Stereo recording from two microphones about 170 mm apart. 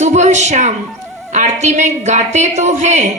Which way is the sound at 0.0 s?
45° right (ahead or behind).